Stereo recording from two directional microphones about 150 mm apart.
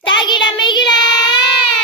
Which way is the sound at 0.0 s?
30° left (ahead or behind).